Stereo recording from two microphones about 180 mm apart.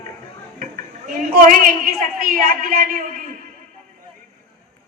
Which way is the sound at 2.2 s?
55° right (ahead or behind).